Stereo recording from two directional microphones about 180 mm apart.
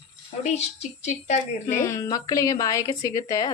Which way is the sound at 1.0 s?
40° left (ahead or behind).